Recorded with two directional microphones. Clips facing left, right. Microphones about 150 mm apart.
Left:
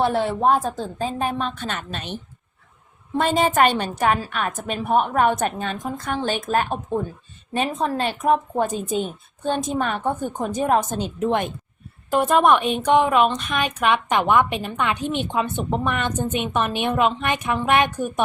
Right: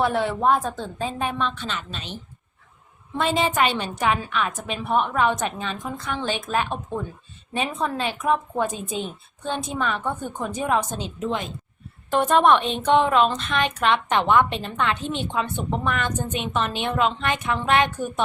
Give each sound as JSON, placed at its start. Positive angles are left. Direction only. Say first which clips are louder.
{"t": 0.0, "sound": "a woman's voice", "louder": "left 2 dB", "side_deg": 35}
{"t": 3.2, "sound": "a woman's voice", "louder": "left 3 dB", "side_deg": 45}
{"t": 12.1, "sound": "a woman's voice", "louder": "left 1 dB", "side_deg": 10}